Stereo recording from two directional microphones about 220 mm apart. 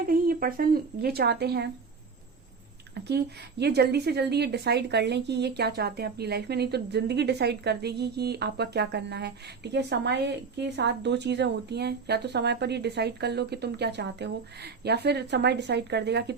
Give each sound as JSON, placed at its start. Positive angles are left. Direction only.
{"t": 0.0, "sound": "a woman's voice", "side_deg": -40}
{"t": 2.9, "sound": "a woman's voice", "side_deg": -50}